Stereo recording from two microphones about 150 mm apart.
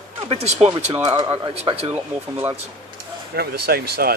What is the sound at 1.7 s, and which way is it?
Speech, 35° right (ahead or behind).